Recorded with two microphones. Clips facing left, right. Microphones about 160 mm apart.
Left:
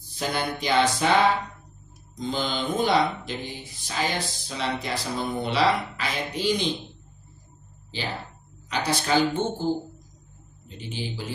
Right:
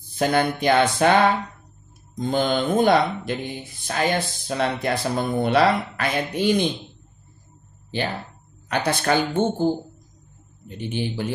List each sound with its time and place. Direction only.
0.1 s speech: 55° right (ahead or behind)
2.1 s speech: 55° right (ahead or behind)
8.6 s speech: 55° right (ahead or behind)
10.8 s speech: 60° right (ahead or behind)